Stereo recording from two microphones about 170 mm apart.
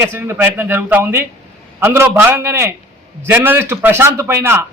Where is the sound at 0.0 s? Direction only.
15° right (ahead or behind).